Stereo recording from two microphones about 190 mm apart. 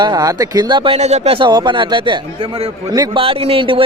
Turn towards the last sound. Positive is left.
turn(degrees=-30)  # may be behind; listen again after turning